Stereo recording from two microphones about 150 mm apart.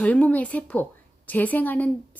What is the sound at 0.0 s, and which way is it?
A woman's voice, 10° left (ahead or behind).